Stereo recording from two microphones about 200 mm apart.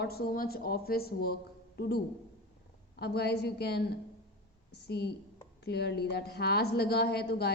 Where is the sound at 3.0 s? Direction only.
55° left (ahead or behind).